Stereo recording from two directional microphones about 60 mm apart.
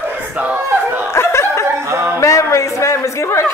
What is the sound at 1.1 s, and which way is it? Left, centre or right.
Snicker, left.